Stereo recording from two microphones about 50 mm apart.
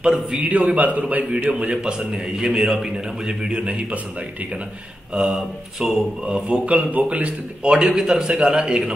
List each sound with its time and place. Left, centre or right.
0.0 s a man's voice: centre
0.4 s a man's voice: right
5.1 s speech: centre
7.7 s a man's voice: centre